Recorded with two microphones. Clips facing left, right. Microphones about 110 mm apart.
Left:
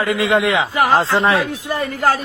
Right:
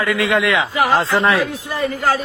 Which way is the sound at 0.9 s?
30° left (ahead or behind).